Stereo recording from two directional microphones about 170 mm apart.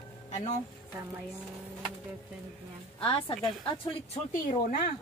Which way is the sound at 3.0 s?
30° left (ahead or behind).